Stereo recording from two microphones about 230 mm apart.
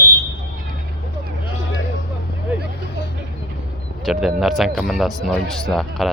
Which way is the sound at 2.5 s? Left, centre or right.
Centre.